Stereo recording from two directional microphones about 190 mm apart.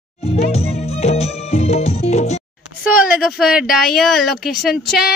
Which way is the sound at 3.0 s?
5° right (ahead or behind).